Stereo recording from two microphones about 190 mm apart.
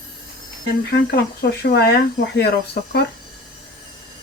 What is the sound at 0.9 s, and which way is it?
Speech, 60° left (ahead or behind).